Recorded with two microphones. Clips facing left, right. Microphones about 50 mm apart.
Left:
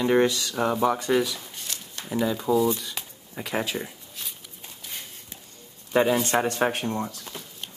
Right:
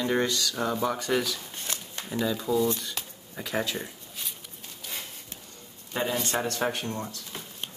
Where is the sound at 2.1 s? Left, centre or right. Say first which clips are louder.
Left 4 dB; centre.